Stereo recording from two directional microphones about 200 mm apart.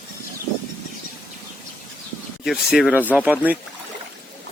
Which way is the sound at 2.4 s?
Centre (ahead or behind).